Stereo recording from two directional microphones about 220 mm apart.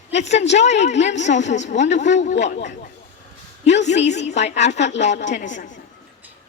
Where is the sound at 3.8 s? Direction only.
30° left (ahead or behind).